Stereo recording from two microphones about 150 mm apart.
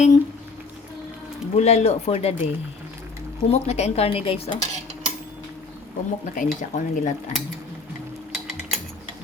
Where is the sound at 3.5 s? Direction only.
45° left (ahead or behind).